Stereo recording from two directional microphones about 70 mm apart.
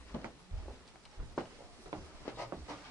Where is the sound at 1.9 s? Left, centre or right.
Right.